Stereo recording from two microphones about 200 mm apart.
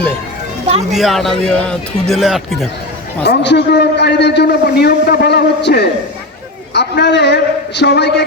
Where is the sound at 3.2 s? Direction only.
60° left (ahead or behind).